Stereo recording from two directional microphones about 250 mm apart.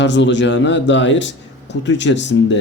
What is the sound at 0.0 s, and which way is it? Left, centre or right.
A man's voice, left.